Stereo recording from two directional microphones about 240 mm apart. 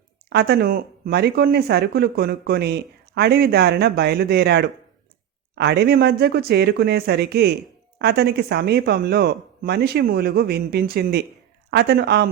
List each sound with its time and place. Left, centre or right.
0.3 s speech: right